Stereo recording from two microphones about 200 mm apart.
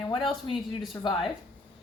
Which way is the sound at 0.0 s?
20° left (ahead or behind).